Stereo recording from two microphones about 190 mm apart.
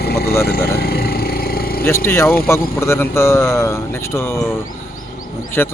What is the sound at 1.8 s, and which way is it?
Speech, 15° left (ahead or behind).